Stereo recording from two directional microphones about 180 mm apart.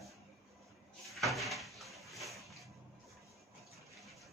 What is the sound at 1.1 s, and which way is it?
Cupboard open or close, centre (ahead or behind).